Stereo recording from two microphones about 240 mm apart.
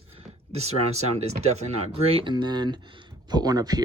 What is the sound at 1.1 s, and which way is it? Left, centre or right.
Speech, right.